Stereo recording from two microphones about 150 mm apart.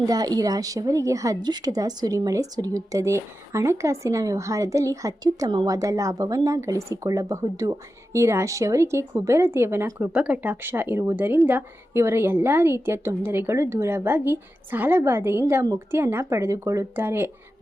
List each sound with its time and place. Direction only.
0.0 s a woman's voice: 25° right (ahead or behind)